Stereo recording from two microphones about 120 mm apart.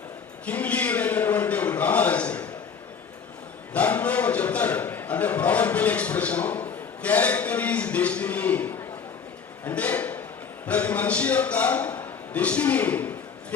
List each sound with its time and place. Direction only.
0.4 s a man's voice: 10° left (ahead or behind)
3.7 s a man's voice: 10° left (ahead or behind)
9.6 s a sound: 15° left (ahead or behind)
10.7 s a man's voice: 10° left (ahead or behind)